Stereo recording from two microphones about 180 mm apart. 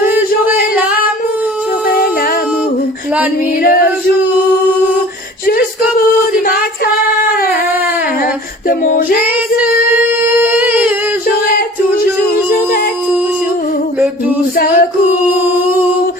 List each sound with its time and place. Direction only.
8.8 s female singing: 50° left (ahead or behind)
10.6 s a sound: 10° right (ahead or behind)
14.5 s singing: 55° left (ahead or behind)